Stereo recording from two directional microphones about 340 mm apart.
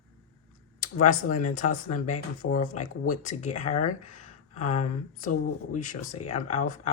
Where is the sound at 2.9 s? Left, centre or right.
Left.